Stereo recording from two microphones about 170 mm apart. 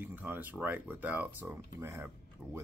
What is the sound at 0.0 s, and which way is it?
Speech, 10° right (ahead or behind).